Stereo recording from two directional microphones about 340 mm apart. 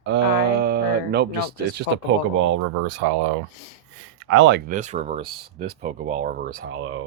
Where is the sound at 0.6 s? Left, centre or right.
Right.